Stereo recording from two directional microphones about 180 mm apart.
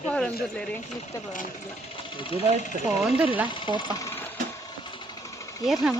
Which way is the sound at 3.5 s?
25° left (ahead or behind).